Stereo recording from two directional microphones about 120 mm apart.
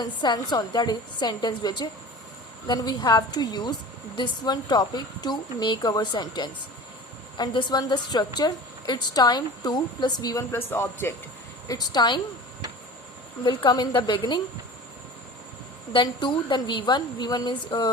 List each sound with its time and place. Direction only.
0.0 s a woman's voice: 35° left (ahead or behind)
10.5 s speech: 20° left (ahead or behind)
11.7 s a woman's voice: 40° left (ahead or behind)
13.4 s a woman's voice: 40° left (ahead or behind)
15.9 s a woman's voice: 40° left (ahead or behind)